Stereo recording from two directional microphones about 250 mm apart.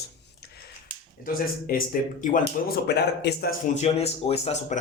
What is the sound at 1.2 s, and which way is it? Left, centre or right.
Speech, left.